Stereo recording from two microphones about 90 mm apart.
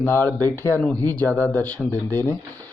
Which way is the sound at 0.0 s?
25° left (ahead or behind).